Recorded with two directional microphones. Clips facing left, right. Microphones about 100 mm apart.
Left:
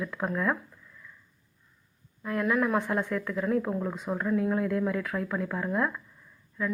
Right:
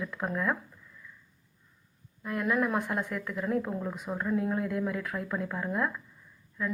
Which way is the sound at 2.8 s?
25° left (ahead or behind).